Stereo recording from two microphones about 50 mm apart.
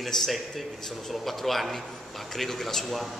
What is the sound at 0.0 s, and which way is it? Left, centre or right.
A man's voice, centre.